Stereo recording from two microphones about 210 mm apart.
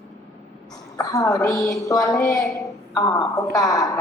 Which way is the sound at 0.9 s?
15° left (ahead or behind).